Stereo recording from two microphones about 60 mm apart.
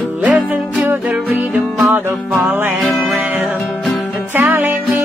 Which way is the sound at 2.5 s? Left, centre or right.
Right.